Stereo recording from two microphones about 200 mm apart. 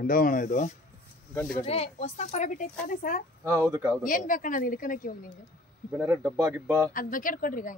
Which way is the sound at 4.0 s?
40° left (ahead or behind).